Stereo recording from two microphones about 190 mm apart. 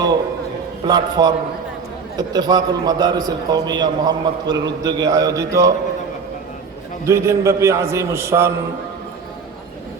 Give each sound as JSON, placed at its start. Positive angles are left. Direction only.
{"t": 0.9, "sound": "a man's voice", "side_deg": -20}
{"t": 7.0, "sound": "a man's voice", "side_deg": -15}